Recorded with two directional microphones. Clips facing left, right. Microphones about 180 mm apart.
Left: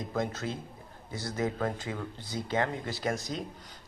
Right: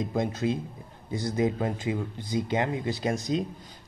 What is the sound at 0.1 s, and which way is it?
Speech, 15° right (ahead or behind).